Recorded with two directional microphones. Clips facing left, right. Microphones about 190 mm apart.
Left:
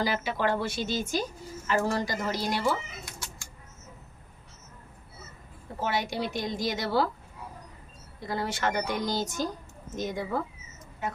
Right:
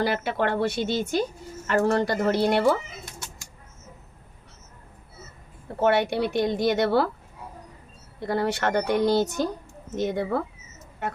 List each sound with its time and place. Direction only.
0.0 s a woman's voice: 60° right (ahead or behind)
5.8 s a woman's voice: 65° right (ahead or behind)
8.2 s a woman's voice: 60° right (ahead or behind)